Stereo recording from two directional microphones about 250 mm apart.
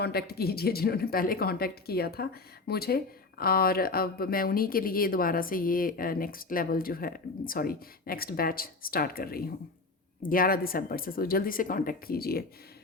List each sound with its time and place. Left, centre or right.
0.0 s speech: left